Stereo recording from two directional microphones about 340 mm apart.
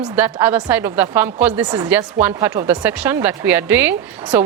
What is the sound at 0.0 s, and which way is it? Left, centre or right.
A woman's voice, centre.